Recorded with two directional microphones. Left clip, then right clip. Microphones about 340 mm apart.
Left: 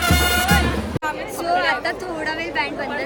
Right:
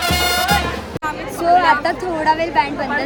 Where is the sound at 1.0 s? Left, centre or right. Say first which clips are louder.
Right 7 dB; centre.